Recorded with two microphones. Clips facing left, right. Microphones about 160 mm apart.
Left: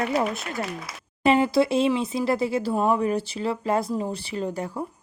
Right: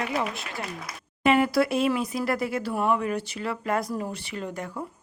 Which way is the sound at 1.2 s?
30° left (ahead or behind).